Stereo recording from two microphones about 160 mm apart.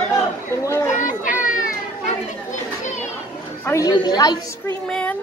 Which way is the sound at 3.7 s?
25° left (ahead or behind).